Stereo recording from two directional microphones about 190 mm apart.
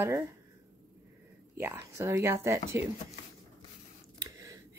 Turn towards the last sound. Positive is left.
turn(degrees=-20)  # may be behind; listen again after turning